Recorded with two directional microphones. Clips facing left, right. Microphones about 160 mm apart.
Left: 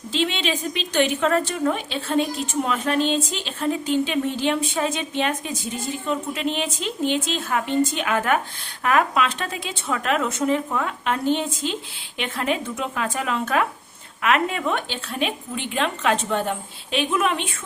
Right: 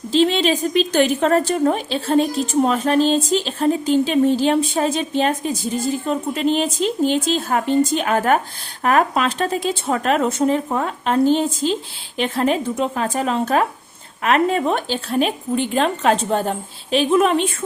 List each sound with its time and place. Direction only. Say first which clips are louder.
0.1 s a woman's voice: right 8 dB; 40° right (ahead or behind)